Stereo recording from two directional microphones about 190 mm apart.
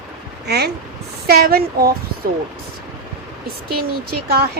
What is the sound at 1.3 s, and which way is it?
Speech, 55° right (ahead or behind).